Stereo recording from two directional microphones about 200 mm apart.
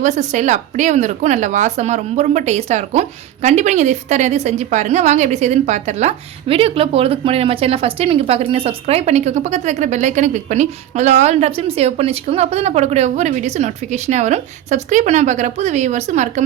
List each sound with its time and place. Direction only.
0.0 s a woman's voice: 35° right (ahead or behind)